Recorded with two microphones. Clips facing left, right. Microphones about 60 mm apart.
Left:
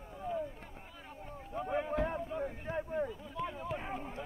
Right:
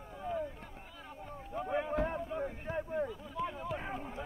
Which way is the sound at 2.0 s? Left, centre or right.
Right.